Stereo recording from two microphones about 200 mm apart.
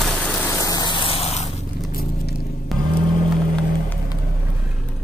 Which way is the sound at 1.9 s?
45° left (ahead or behind).